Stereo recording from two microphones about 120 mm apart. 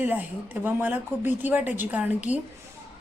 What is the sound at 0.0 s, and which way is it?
Speech, 15° right (ahead or behind).